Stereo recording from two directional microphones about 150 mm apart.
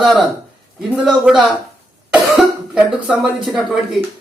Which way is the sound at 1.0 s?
5° right (ahead or behind).